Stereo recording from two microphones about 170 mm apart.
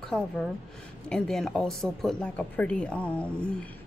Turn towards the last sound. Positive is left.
turn(degrees=5)  # may be behind; listen again after turning